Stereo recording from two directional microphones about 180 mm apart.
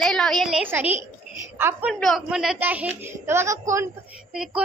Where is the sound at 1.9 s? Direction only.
Centre (ahead or behind); by 3.8 s 15° right (ahead or behind).